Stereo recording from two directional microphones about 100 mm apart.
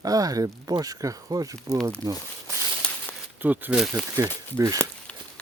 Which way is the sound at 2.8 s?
10° left (ahead or behind).